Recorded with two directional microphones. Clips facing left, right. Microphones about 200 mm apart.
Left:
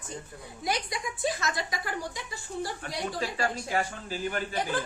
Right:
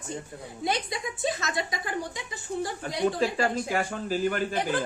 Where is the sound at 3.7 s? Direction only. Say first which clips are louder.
Right 3 dB; 45° right (ahead or behind).